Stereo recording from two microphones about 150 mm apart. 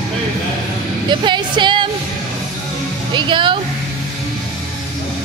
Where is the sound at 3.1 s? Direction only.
30° right (ahead or behind).